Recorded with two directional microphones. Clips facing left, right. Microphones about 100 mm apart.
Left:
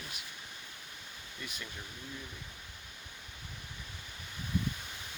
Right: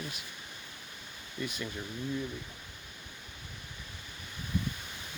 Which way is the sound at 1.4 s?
5° right (ahead or behind).